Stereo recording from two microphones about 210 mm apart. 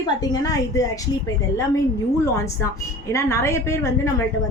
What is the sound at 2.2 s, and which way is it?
A woman's voice, 15° left (ahead or behind).